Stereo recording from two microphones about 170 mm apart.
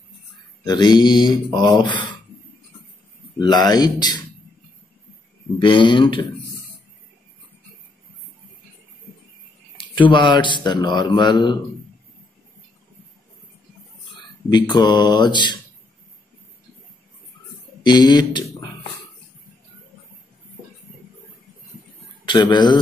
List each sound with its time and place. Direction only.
0.7 s speech: 25° left (ahead or behind)
3.3 s speech: 25° left (ahead or behind)
5.6 s speech: 30° left (ahead or behind)
9.9 s speech: 30° left (ahead or behind)
14.5 s speech: 25° left (ahead or behind)
17.8 s speech: 25° left (ahead or behind)
22.2 s speech: 25° left (ahead or behind)